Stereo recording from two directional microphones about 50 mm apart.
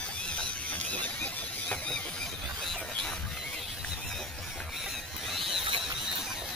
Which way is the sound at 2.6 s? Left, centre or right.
Centre.